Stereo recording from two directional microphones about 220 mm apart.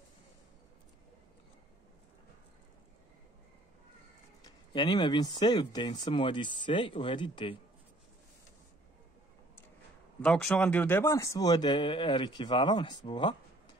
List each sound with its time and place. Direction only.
4.4 s speech: 20° left (ahead or behind)
10.2 s speech: 5° left (ahead or behind); by 13.4 s 20° left (ahead or behind)